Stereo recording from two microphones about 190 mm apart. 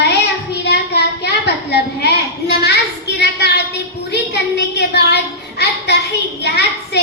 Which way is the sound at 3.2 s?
60° left (ahead or behind).